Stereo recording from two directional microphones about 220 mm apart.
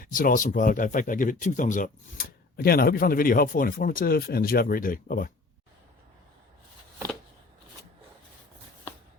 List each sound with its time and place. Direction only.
0.0 s speech: 40° left (ahead or behind)